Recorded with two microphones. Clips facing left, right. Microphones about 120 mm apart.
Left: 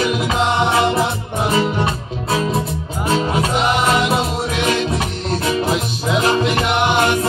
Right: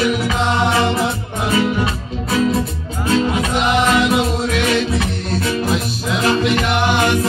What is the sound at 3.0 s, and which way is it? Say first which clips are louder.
Music: right 1 dB; 35° left (ahead or behind).